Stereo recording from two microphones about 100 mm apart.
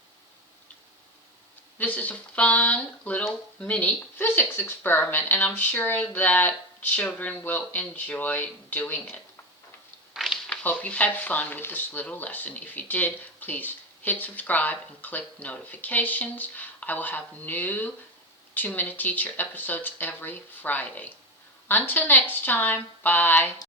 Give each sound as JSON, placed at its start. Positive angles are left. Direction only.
{"t": 1.8, "sound": "speech", "side_deg": 15}
{"t": 10.2, "sound": "a sound", "side_deg": 0}
{"t": 10.5, "sound": "speech", "side_deg": 15}